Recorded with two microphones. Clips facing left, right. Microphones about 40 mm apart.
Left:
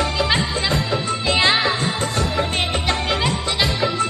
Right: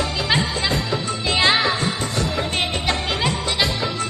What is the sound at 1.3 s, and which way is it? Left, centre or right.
Music, centre.